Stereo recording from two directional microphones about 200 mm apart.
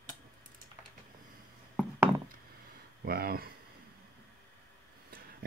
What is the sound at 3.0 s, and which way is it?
Speech, 50° right (ahead or behind).